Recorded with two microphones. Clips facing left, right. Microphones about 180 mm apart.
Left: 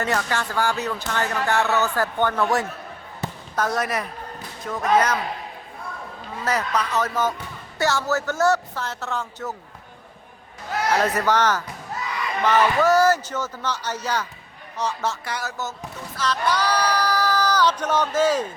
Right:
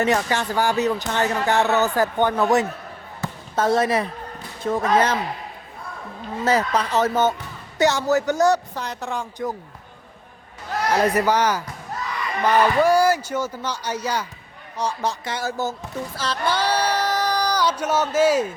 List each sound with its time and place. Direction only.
0.0 s speech: 15° right (ahead or behind)
6.4 s speech: 25° right (ahead or behind)
10.9 s speech: 15° right (ahead or behind); by 15.7 s 30° right (ahead or behind)
16.1 s a sound: 30° right (ahead or behind); by 18.5 s 10° right (ahead or behind)